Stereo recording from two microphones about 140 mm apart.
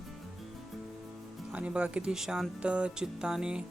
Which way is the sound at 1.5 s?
10° right (ahead or behind).